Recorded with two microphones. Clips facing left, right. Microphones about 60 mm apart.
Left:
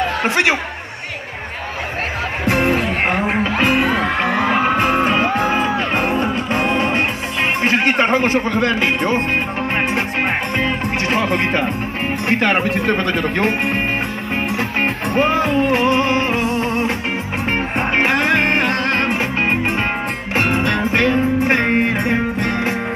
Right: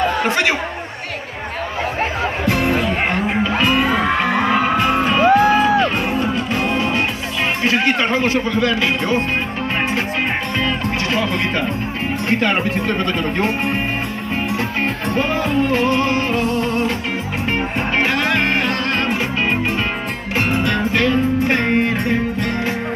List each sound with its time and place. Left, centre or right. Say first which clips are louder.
2.4 s music: left 2 dB; left
7.6 s speech: left 1 dB; left
10.6 s a man's voice: left 1 dB; left
14.8 s music: left 4 dB; left
20.3 s music: left 1 dB; left